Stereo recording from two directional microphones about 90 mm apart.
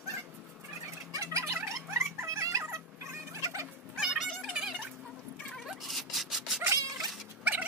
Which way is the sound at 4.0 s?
5° right (ahead or behind).